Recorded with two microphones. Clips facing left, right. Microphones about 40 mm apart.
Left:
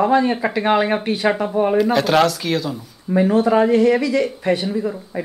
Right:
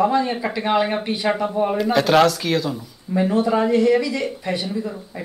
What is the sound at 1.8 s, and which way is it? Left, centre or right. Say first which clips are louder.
Speech: right 1 dB; centre.